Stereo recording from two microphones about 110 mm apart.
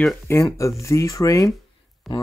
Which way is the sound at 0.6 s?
25° left (ahead or behind).